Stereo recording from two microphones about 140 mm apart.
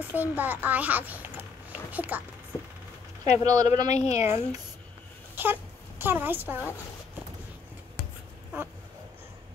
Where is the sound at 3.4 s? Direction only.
25° right (ahead or behind).